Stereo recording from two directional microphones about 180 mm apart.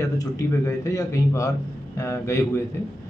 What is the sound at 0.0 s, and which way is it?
A man's voice, 15° left (ahead or behind).